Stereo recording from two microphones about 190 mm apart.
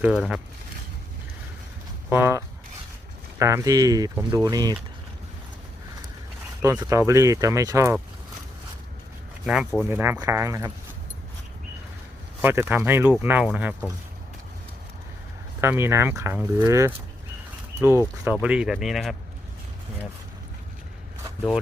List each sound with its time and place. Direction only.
0.0 s speech: 5° right (ahead or behind)
2.0 s speech: 10° right (ahead or behind)
6.6 s speech: 15° right (ahead or behind)
9.5 s speech: 5° right (ahead or behind)
12.4 s speech: 10° right (ahead or behind)
15.6 s speech: 15° right (ahead or behind)